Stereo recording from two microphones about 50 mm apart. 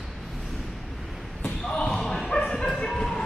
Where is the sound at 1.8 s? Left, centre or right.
Centre.